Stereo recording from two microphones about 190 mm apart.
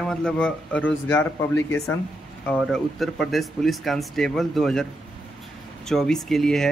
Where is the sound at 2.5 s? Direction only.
Centre (ahead or behind).